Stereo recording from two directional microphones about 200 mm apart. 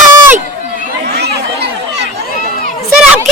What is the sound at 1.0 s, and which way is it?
Chatter, 55° right (ahead or behind).